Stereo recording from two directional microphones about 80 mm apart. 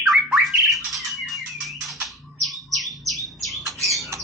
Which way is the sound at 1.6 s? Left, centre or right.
Centre.